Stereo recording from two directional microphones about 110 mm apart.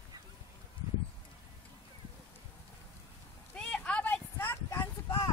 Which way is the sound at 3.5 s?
10° left (ahead or behind).